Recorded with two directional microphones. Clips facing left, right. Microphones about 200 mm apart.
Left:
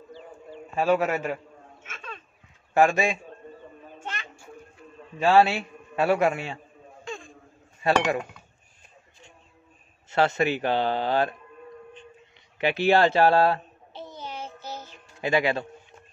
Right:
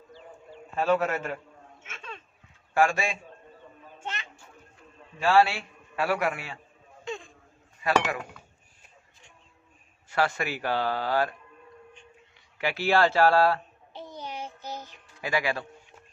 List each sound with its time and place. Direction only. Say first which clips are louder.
0.7 s a man's voice: left 2 dB; 10° left (ahead or behind)
1.8 s a sound: left 1 dB; 25° right (ahead or behind)
2.7 s a man's voice: left 4 dB; 20° left (ahead or behind)
4.0 s children playing: even; 20° right (ahead or behind)
5.2 s a man's voice: left 3 dB; 20° left (ahead or behind)
7.1 s a sound: right 1 dB; 20° right (ahead or behind)
7.8 s a man's voice: left 2 dB; 25° left (ahead or behind)
10.0 s a man's voice: left 5 dB; 25° left (ahead or behind)
12.5 s a man's voice: left 4 dB; 20° left (ahead or behind)
13.9 s child singing: left 1 dB; 15° right (ahead or behind)
15.1 s a man's voice: left 5 dB; 25° left (ahead or behind)